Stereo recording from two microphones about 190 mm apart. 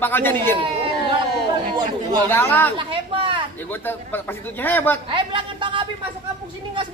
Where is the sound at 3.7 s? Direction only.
10° left (ahead or behind).